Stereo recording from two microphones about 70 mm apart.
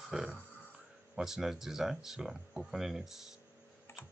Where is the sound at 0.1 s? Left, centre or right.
Centre.